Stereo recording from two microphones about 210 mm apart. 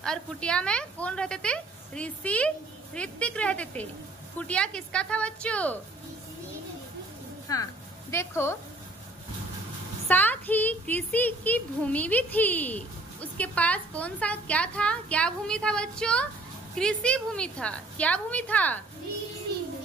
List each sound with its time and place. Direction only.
0.0 s a woman's voice: 5° left (ahead or behind)
7.5 s speech: 15° left (ahead or behind)
10.0 s a woman's voice: 10° left (ahead or behind)